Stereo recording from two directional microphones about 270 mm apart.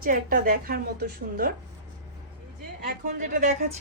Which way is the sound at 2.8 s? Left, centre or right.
Right.